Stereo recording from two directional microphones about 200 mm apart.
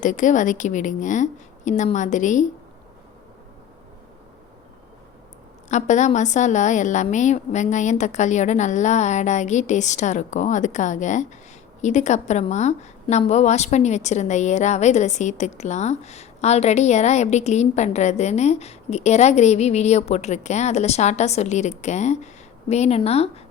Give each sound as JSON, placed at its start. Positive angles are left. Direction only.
{"t": 0.0, "sound": "a woman's voice", "side_deg": 40}
{"t": 5.6, "sound": "a woman's voice", "side_deg": 35}